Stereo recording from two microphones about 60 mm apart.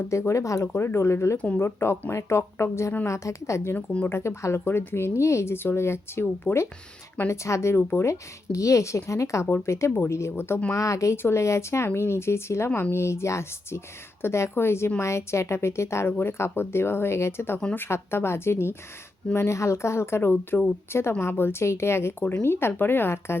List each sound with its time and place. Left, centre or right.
0.1 s speech: left
0.7 s speech: left
3.8 s speech: left
4.1 s speech: left
6.5 s speech: left
7.3 s speech: left
8.0 s speech: left
10.7 s speech: left
11.2 s speech: left
16.0 s speech: left
22.2 s speech: left